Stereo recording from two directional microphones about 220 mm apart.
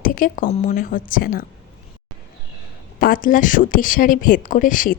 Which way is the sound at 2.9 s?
40° left (ahead or behind).